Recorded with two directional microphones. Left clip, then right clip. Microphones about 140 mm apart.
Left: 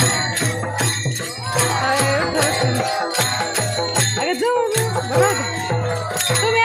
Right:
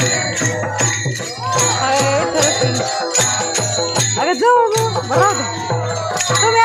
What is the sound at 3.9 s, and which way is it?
Jingle bell, 10° right (ahead or behind).